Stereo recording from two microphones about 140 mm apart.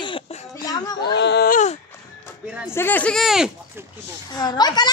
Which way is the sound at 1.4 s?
70° left (ahead or behind).